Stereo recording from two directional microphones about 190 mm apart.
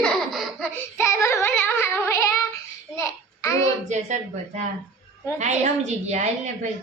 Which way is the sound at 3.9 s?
40° right (ahead or behind).